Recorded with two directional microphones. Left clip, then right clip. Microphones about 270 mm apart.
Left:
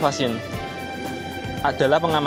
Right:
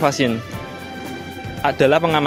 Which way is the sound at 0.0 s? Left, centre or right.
Right.